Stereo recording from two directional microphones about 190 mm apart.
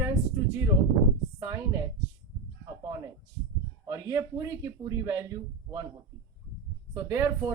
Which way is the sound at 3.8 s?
20° right (ahead or behind).